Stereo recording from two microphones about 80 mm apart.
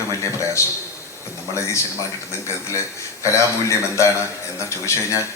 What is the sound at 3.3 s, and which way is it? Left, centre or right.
A man's voice, left.